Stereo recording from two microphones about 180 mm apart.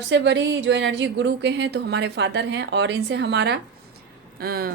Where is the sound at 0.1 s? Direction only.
75° right (ahead or behind).